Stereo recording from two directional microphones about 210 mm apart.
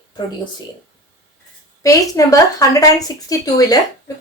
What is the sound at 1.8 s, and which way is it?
Speech, 15° left (ahead or behind).